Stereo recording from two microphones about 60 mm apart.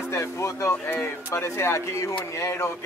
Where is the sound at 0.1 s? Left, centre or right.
Left.